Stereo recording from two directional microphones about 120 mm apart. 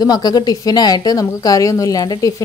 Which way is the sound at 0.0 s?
35° left (ahead or behind).